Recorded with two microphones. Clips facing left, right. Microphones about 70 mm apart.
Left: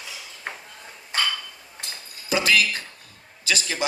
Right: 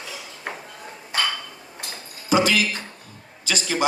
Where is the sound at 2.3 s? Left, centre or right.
Right.